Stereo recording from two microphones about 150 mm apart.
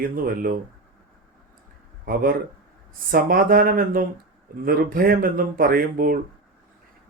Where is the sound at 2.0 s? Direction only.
80° right.